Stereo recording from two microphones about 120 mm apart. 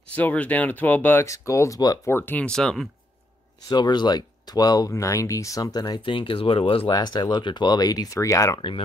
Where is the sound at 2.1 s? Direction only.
15° left (ahead or behind).